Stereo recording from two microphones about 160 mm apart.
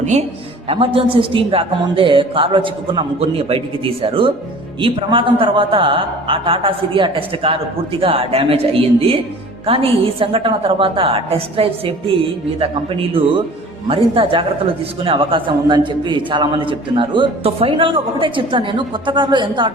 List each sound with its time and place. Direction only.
0.0 s a man's voice: 45° right (ahead or behind)
0.7 s a man's voice: 35° right (ahead or behind)